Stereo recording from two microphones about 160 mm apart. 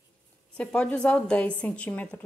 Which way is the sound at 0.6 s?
5° left (ahead or behind).